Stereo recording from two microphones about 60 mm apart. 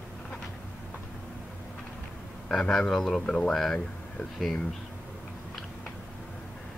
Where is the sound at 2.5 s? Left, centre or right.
Centre.